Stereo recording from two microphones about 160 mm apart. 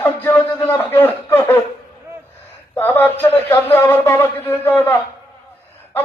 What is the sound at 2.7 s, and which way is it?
A man's voice, 15° left (ahead or behind).